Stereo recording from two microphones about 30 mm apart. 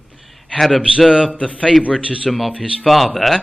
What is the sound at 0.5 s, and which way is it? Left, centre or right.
Speech, centre.